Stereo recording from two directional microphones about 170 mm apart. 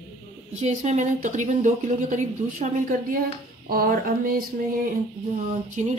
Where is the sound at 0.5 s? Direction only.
40° right (ahead or behind).